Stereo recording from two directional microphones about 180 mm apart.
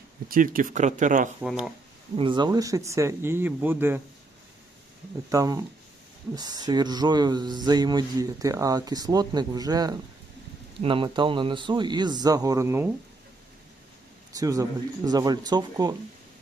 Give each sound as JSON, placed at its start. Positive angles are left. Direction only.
{"t": 0.3, "sound": "speech", "side_deg": -50}
{"t": 1.4, "sound": "speech", "side_deg": 0}
{"t": 2.1, "sound": "speech", "side_deg": -25}
{"t": 5.3, "sound": "speech", "side_deg": -20}
{"t": 14.3, "sound": "speech", "side_deg": -20}